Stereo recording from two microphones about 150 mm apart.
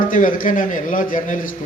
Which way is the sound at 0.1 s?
65° left (ahead or behind).